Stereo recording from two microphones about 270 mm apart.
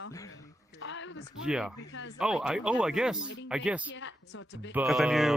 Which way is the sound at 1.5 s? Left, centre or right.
Centre.